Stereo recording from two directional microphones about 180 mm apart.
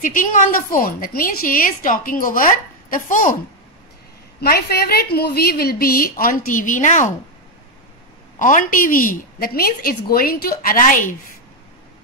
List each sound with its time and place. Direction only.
0.0 s a woman's voice: 45° left (ahead or behind)
4.4 s a woman's voice: 60° left (ahead or behind); by 7.1 s 45° left (ahead or behind)
8.4 s a woman's voice: 45° left (ahead or behind)